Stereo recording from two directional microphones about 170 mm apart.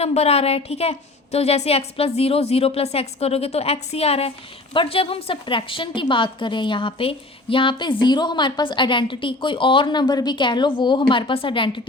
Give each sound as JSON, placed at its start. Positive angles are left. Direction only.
{"t": 0.0, "sound": "a woman's voice", "side_deg": 40}